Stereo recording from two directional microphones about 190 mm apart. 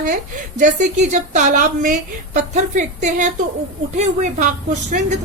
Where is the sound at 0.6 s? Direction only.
40° right (ahead or behind).